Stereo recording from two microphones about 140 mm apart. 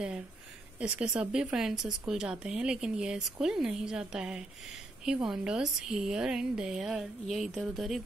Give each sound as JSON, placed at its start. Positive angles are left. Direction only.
{"t": 0.7, "sound": "a woman's voice", "side_deg": -10}